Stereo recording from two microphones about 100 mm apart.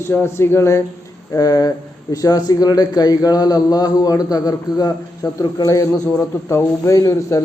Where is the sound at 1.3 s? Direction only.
40° left (ahead or behind).